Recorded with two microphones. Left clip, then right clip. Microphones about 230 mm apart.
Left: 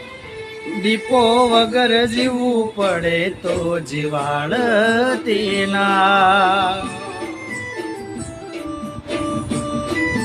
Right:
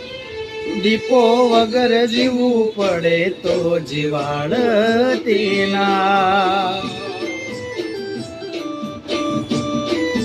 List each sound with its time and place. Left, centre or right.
0.9 s mantra: centre